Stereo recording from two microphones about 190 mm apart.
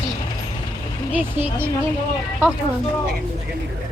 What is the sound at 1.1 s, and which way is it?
Speech, 10° right (ahead or behind).